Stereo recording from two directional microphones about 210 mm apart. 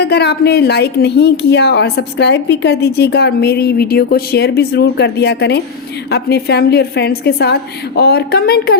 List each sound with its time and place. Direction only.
0.0 s a woman's voice: 50° left (ahead or behind)